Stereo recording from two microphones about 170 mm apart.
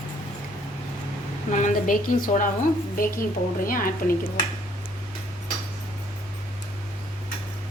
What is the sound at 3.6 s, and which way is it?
Speech, 55° left (ahead or behind).